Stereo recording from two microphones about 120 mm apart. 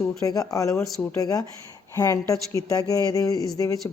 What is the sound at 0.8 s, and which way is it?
Speech, 5° left (ahead or behind).